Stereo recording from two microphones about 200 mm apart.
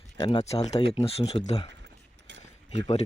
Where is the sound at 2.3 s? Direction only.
65° right (ahead or behind).